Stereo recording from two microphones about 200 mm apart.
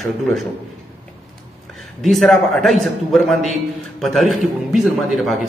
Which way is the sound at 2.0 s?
Centre (ahead or behind).